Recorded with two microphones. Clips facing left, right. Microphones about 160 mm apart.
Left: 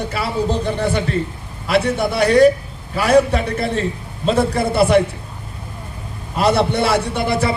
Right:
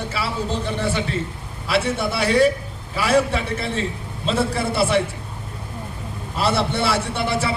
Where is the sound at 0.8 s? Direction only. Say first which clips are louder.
Left 4 dB; 40° left (ahead or behind).